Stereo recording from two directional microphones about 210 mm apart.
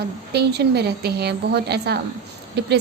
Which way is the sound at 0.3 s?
50° right (ahead or behind).